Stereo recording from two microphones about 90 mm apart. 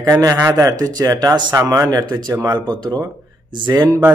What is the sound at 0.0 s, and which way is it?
A man's voice, 40° right (ahead or behind).